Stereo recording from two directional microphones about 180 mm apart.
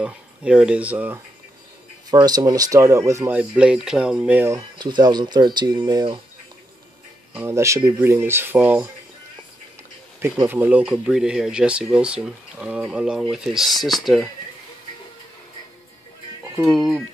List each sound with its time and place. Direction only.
0.0 s speech: 5° right (ahead or behind)
2.0 s speech: 20° right (ahead or behind)
4.6 s speech: 25° right (ahead or behind)
7.3 s speech: 15° right (ahead or behind)
10.2 s speech: 15° right (ahead or behind)
16.6 s speech: centre (ahead or behind)